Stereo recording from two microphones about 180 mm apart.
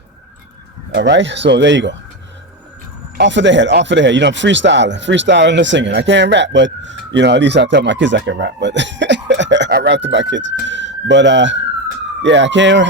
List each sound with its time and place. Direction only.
0.9 s speech: 80° right
3.2 s speech: 85° right